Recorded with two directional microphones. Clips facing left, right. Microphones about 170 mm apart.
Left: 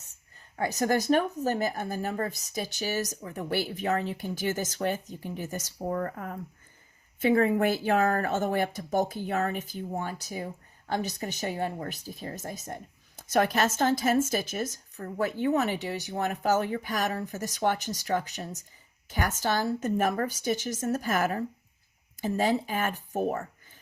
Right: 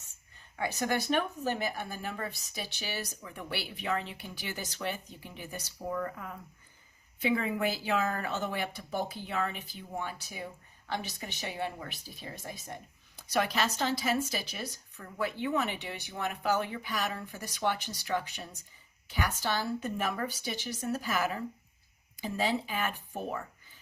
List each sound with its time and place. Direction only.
0.5 s speech: 40° left (ahead or behind)